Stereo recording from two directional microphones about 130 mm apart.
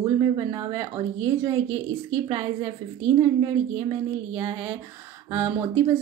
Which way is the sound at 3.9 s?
40° right (ahead or behind).